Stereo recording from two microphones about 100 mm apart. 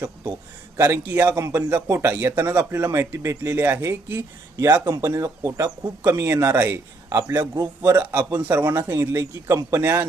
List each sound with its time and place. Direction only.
0.8 s speech: 30° right (ahead or behind)
2.4 s speech: 30° right (ahead or behind)
8.4 s speech: 20° right (ahead or behind)